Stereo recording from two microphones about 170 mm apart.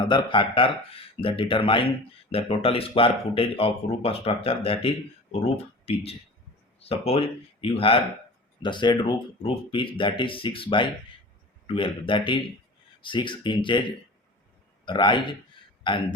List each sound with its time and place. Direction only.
0.0 s speech: 30° left (ahead or behind)
14.8 s speech: 30° left (ahead or behind)